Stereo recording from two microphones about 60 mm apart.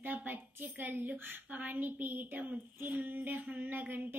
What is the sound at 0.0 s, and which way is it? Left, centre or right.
Speech, right.